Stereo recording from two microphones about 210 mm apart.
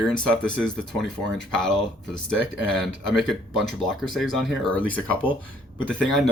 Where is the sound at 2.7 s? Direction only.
Centre (ahead or behind).